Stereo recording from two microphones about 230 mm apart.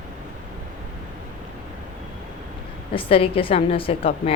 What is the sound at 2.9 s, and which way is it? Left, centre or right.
A woman's voice, left.